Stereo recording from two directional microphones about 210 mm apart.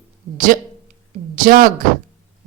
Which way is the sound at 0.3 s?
40° right (ahead or behind).